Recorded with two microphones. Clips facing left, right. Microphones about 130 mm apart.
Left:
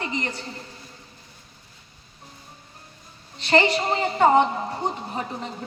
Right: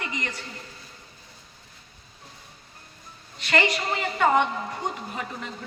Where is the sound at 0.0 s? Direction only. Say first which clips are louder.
Left 4 dB; 30° left (ahead or behind).